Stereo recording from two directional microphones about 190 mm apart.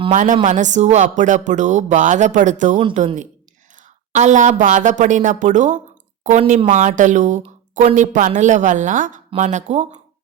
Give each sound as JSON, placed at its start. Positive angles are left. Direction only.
{"t": 0.1, "sound": "a woman's voice", "side_deg": -40}